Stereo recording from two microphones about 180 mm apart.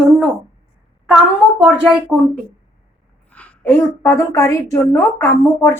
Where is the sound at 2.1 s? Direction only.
Centre (ahead or behind).